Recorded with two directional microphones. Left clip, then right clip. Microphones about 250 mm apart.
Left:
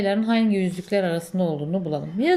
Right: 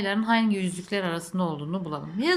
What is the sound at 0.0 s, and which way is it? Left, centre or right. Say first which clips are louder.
Speech: left 2 dB; centre.